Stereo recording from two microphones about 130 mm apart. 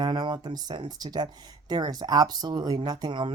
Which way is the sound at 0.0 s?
35° right (ahead or behind).